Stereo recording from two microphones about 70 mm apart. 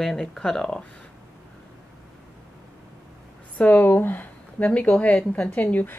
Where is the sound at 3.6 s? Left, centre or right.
Left.